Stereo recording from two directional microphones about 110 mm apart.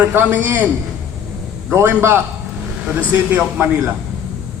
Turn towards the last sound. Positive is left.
turn(degrees=-15)  # may be behind; listen again after turning